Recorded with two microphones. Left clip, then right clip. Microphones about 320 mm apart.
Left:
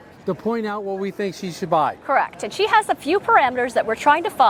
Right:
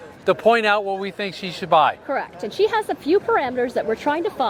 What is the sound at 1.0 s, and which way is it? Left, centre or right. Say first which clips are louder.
Speech: left 1 dB; right.